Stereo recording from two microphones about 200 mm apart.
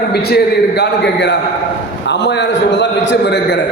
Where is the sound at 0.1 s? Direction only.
55° left (ahead or behind).